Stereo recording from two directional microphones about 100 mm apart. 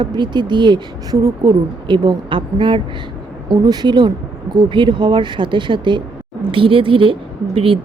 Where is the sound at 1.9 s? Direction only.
55° right (ahead or behind).